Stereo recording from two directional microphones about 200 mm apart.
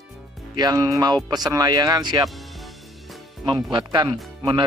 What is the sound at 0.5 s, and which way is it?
Speech, 20° right (ahead or behind).